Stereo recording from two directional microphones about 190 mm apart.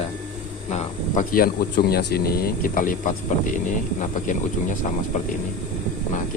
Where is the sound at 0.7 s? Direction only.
40° left (ahead or behind).